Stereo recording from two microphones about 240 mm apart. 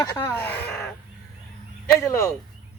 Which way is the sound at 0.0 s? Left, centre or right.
Centre.